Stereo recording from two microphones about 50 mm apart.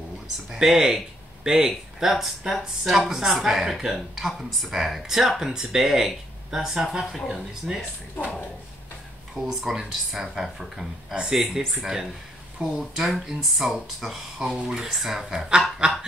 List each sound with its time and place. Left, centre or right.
0.5 s speech: centre
9.3 s speech: centre
15.8 s speech: centre